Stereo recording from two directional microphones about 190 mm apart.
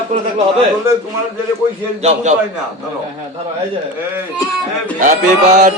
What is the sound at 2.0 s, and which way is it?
Speech, 40° right (ahead or behind).